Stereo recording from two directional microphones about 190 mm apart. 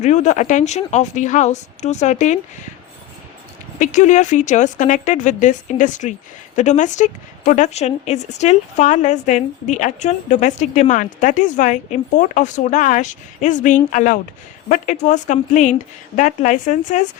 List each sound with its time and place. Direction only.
0.0 s a woman's voice: 40° left (ahead or behind)
3.8 s a woman's voice: 40° left (ahead or behind)